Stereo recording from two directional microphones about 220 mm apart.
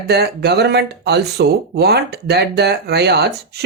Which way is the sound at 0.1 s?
50° right (ahead or behind).